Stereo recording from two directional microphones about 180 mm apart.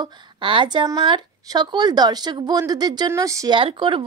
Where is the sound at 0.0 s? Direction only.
25° right (ahead or behind).